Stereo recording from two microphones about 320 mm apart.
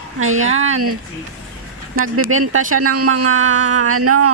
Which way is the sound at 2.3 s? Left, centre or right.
Right.